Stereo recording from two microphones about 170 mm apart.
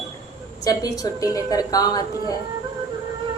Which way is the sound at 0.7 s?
20° left (ahead or behind).